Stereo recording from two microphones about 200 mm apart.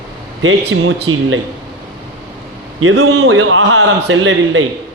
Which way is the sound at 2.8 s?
90° right.